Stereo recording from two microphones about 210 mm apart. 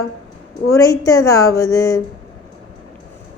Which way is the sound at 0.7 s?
15° left (ahead or behind).